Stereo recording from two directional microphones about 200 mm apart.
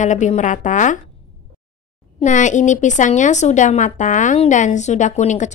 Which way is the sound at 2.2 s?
40° left (ahead or behind).